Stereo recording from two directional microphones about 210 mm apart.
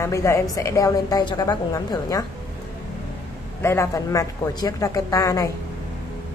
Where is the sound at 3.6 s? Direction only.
10° left (ahead or behind).